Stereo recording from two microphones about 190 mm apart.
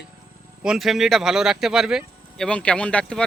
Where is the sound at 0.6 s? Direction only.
Centre (ahead or behind).